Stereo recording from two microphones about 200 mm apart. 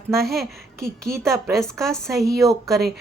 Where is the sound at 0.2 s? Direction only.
Centre (ahead or behind).